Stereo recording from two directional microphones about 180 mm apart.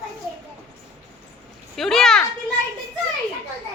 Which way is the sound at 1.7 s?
Centre (ahead or behind).